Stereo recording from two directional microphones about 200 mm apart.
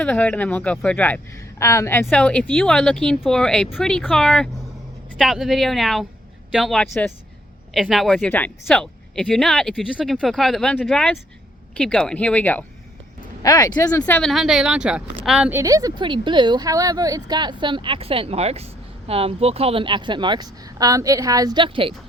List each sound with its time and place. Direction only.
0.0 s a woman's voice: 5° left (ahead or behind)
13.4 s speech: 20° left (ahead or behind)
14.0 s a woman's voice: 5° left (ahead or behind); by 21.9 s 25° right (ahead or behind)